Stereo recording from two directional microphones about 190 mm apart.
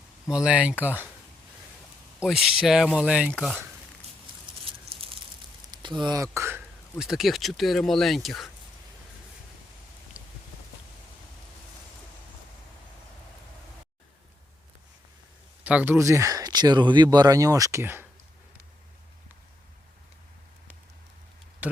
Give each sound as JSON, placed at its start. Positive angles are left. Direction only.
{"t": 0.3, "sound": "speech", "side_deg": -5}
{"t": 2.1, "sound": "speech", "side_deg": -5}
{"t": 4.9, "sound": "a sound", "side_deg": -30}
{"t": 5.7, "sound": "speech", "side_deg": -25}
{"t": 7.0, "sound": "speech", "side_deg": 0}
{"t": 10.2, "sound": "raindrop", "side_deg": -5}
{"t": 15.6, "sound": "speech", "side_deg": -10}
{"t": 21.6, "sound": "speech", "side_deg": -10}